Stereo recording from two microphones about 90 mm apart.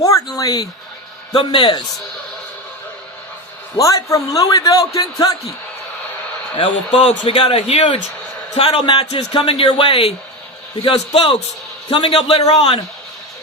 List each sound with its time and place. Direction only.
0.0 s a sound: 40° left (ahead or behind)
1.5 s a man's voice: 55° left (ahead or behind)
3.8 s a man's voice: 35° left (ahead or behind)
6.9 s speech: 90° left
8.8 s speech: 70° left (ahead or behind); by 12.8 s 90° left